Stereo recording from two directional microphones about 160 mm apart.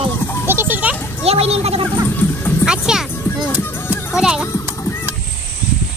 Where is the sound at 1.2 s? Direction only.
40° right (ahead or behind).